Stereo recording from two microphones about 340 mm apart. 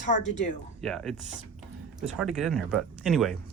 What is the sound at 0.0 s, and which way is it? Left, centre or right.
Speech, left.